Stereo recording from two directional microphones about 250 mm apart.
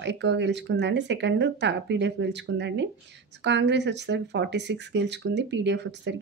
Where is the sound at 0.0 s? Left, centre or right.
Right.